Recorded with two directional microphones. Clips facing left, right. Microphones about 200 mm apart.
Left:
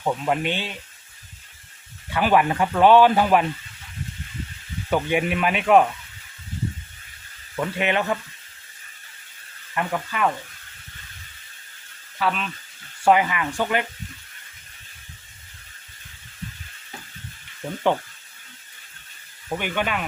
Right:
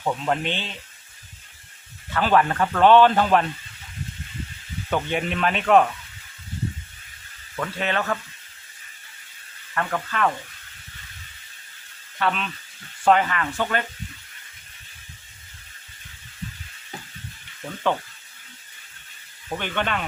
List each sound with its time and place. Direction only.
0.0 s speech: 10° left (ahead or behind)
2.1 s speech: 10° left (ahead or behind)
4.9 s speech: 10° left (ahead or behind)
7.5 s speech: 15° left (ahead or behind)
9.7 s speech: 10° left (ahead or behind)
12.2 s speech: 5° left (ahead or behind)
19.5 s speech: 10° left (ahead or behind)